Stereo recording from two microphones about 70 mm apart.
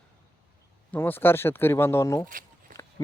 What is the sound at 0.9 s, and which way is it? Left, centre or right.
Speech, left.